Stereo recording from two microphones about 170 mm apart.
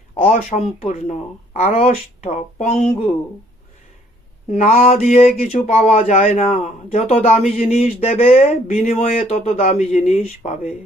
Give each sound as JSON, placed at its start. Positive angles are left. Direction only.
{"t": 0.2, "sound": "speech", "side_deg": 45}
{"t": 4.5, "sound": "speech", "side_deg": 50}